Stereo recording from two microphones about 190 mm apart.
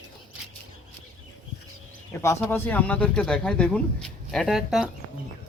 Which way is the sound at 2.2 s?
15° left (ahead or behind).